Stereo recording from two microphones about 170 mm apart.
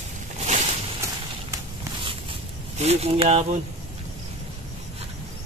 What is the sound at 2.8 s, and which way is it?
Speech, 35° right (ahead or behind).